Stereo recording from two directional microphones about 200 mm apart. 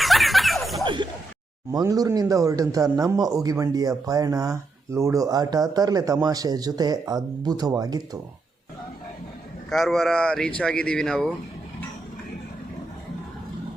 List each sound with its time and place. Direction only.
0.0 s a sound: centre (ahead or behind)
1.7 s speech: 20° right (ahead or behind)
9.6 s a man's voice: centre (ahead or behind)